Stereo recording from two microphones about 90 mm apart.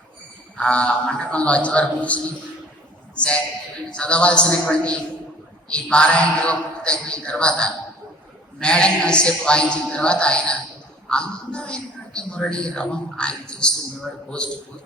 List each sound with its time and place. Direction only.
0.5 s a woman's voice: 15° left (ahead or behind)